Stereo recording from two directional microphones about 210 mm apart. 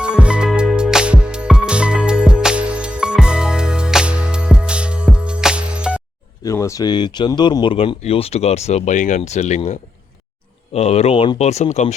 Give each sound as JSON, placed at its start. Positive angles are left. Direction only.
{"t": 0.0, "sound": "music", "side_deg": -5}
{"t": 6.4, "sound": "speech", "side_deg": 15}
{"t": 10.8, "sound": "speech", "side_deg": 30}